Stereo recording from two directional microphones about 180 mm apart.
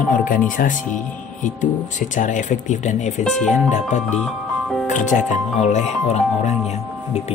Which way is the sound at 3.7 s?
40° left (ahead or behind).